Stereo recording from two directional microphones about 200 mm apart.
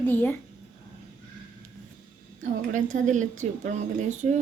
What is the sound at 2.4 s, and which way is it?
A woman's voice, 40° right (ahead or behind).